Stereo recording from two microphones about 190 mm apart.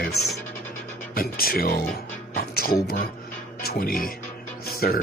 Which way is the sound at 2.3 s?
55° left (ahead or behind).